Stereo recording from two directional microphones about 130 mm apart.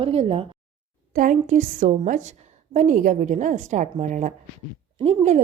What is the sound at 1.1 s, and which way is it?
A woman's voice, 85° right.